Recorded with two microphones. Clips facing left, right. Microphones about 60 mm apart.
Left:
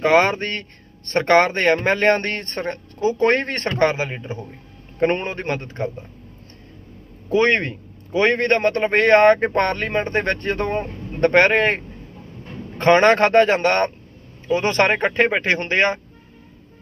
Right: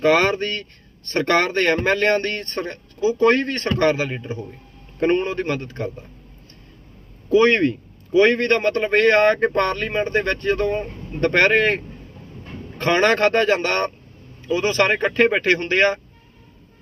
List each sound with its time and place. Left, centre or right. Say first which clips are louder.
0.0 s speech: left 1 dB; left
7.3 s speech: right 2 dB; left
12.8 s speech: left 3 dB; left